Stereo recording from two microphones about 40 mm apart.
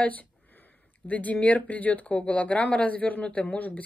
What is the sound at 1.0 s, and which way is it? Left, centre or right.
A woman's voice, left.